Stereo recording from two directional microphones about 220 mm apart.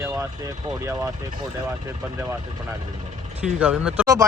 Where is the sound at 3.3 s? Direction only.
5° right (ahead or behind).